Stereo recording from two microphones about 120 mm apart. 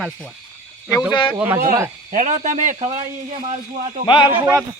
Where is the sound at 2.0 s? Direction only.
90° right; by 2.9 s 75° right (ahead or behind).